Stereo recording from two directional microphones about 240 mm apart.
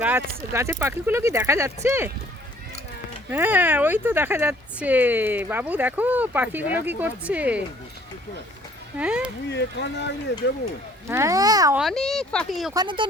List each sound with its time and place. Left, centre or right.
0.0 s speech: centre
3.2 s speech: centre
9.0 s speech: centre
9.5 s speech: left
11.1 s speech: centre
11.8 s speech: centre
12.7 s speech: centre